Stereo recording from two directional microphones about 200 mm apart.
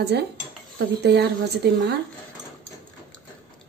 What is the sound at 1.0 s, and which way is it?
Speech, 55° right (ahead or behind).